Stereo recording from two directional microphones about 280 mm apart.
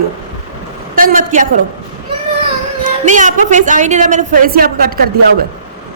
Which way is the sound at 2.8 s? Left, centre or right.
Right.